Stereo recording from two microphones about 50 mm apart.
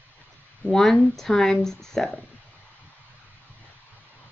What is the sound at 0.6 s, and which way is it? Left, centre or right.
Speech, centre.